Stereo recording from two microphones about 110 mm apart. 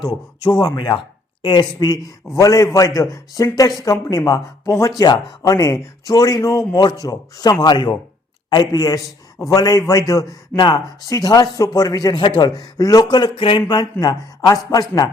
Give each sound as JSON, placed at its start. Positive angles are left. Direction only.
{"t": 0.1, "sound": "speech", "side_deg": 40}
{"t": 13.3, "sound": "a sound", "side_deg": 50}
{"t": 14.0, "sound": "speech", "side_deg": 35}